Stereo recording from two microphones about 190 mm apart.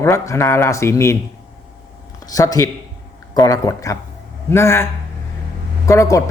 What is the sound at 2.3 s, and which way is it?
Speech, 20° left (ahead or behind).